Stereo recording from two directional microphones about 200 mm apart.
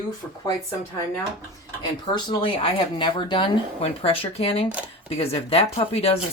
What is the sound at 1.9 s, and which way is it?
Speech, 20° left (ahead or behind).